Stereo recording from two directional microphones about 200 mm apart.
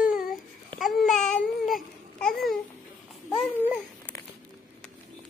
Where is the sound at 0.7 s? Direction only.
Centre (ahead or behind).